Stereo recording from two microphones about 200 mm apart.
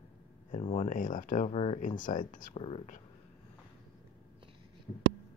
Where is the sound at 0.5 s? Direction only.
30° left (ahead or behind).